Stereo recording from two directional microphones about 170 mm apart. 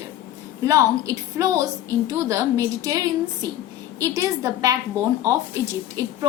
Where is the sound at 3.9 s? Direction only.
20° right (ahead or behind).